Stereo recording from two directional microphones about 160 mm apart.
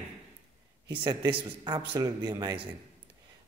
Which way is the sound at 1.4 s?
25° right (ahead or behind).